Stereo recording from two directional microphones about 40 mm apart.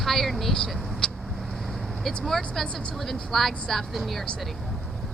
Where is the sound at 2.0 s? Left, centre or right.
Centre.